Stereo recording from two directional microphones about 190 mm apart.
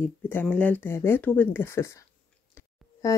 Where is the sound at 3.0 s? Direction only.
15° left (ahead or behind).